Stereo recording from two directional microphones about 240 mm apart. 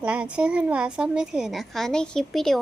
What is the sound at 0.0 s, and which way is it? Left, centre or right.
A woman's voice, centre.